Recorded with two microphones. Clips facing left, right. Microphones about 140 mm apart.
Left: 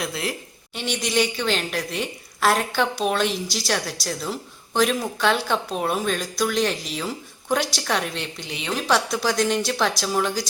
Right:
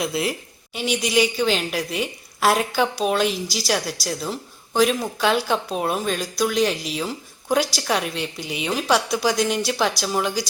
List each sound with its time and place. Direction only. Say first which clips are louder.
0.0 s a woman's voice: right 4 dB; 5° right (ahead or behind)